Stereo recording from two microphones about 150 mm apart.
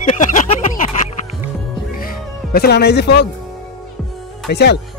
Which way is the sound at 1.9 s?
75° left (ahead or behind).